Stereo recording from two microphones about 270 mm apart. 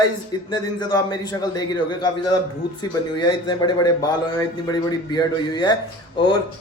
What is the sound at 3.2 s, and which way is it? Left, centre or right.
Speech, centre.